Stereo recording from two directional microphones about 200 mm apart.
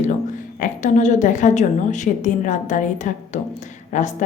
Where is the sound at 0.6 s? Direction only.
40° left (ahead or behind).